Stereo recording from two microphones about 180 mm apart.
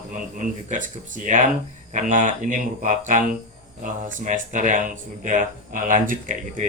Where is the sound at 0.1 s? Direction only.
45° right (ahead or behind).